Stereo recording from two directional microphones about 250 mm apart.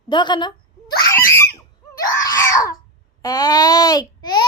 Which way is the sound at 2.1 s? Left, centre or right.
Centre.